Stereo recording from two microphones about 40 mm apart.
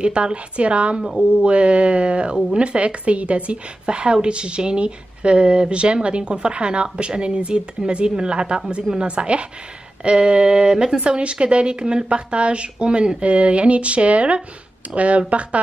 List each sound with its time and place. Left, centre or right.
0.0 s a woman's voice: right